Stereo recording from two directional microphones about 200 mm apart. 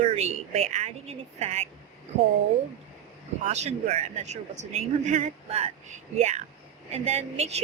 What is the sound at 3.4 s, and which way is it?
A woman's voice, 35° right (ahead or behind).